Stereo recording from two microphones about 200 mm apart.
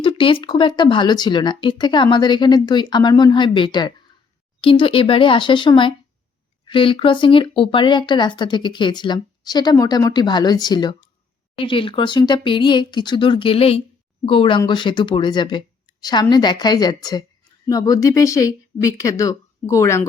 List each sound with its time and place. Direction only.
0.0 s speech: 25° left (ahead or behind)